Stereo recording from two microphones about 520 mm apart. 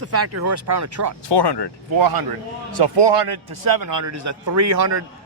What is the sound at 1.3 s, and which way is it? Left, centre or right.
Speech, left.